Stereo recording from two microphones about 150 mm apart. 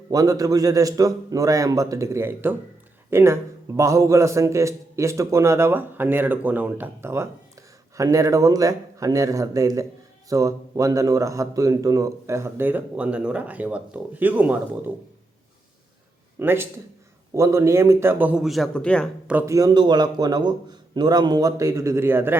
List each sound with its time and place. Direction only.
0.1 s a man's voice: 25° right (ahead or behind)
16.4 s speech: 15° right (ahead or behind); by 19.1 s 5° left (ahead or behind)
19.3 s speech: 10° right (ahead or behind)
19.5 s a man's voice: 25° right (ahead or behind)